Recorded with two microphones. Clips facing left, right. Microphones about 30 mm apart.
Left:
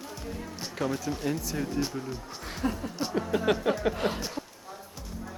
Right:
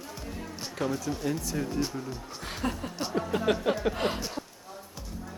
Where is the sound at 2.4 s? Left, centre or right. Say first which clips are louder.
Left 1 dB; right.